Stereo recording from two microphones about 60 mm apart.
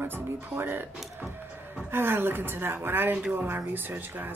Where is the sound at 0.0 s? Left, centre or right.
Right.